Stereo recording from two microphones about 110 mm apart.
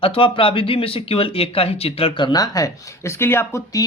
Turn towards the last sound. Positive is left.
turn(degrees=20)  # may be behind; listen again after turning